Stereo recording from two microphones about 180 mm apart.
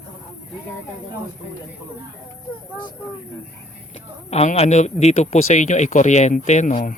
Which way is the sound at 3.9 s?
35° left (ahead or behind).